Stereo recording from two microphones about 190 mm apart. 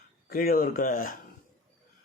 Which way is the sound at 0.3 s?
50° left (ahead or behind).